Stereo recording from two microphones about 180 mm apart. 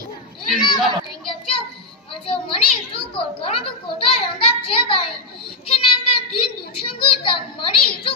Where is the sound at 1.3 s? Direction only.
30° left (ahead or behind).